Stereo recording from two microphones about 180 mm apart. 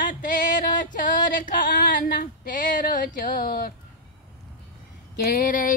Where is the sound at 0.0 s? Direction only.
50° left (ahead or behind).